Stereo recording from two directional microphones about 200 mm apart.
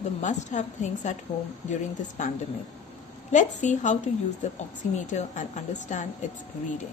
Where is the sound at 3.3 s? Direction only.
40° left (ahead or behind).